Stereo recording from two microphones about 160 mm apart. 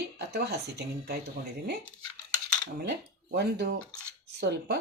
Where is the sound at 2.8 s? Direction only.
85° right.